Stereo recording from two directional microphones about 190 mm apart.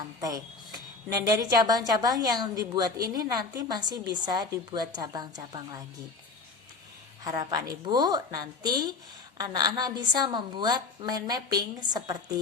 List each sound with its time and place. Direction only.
0.0 s a woman's voice: 20° right (ahead or behind)
7.3 s a woman's voice: 20° right (ahead or behind)